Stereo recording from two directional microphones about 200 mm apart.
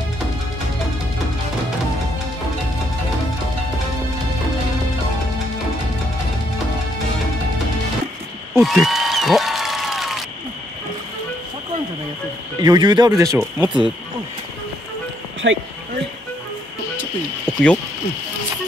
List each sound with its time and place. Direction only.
8.5 s applause: centre (ahead or behind)
12.6 s speech: 20° right (ahead or behind)
15.4 s speech: 60° right (ahead or behind)
17.5 s a sound: 5° left (ahead or behind)